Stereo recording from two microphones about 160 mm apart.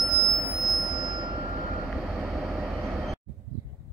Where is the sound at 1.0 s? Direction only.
25° right (ahead or behind).